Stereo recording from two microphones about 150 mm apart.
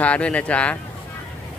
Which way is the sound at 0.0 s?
10° left (ahead or behind).